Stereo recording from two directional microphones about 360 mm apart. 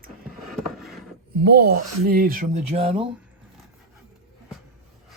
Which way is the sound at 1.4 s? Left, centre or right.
Right.